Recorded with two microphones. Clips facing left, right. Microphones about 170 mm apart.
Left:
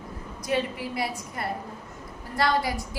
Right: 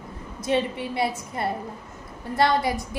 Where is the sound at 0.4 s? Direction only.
25° right (ahead or behind).